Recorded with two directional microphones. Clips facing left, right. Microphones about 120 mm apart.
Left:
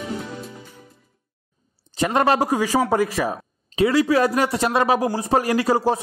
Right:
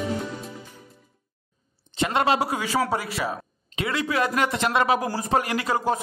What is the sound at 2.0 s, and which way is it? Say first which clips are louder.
Speech: left 3 dB; 40° left (ahead or behind).